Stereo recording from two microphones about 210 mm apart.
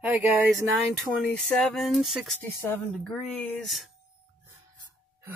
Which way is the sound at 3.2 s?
Centre (ahead or behind).